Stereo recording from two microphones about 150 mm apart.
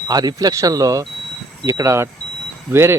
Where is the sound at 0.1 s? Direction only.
25° right (ahead or behind).